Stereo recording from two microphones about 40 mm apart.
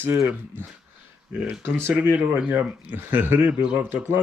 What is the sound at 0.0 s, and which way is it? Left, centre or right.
Speech, right.